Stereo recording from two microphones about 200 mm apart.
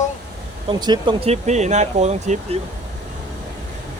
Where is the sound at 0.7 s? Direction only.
20° right (ahead or behind).